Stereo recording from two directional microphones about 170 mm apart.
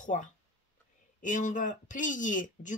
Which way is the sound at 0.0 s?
45° left (ahead or behind).